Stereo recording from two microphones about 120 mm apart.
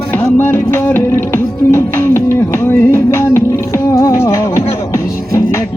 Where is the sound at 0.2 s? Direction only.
20° left (ahead or behind).